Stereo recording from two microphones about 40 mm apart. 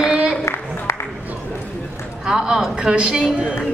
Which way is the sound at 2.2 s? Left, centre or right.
Centre.